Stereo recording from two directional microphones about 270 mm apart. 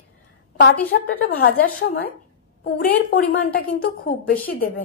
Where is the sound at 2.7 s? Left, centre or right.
Left.